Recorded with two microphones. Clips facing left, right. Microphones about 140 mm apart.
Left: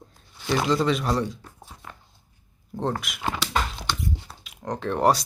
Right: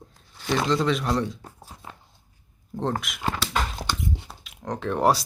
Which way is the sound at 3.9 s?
20° right (ahead or behind).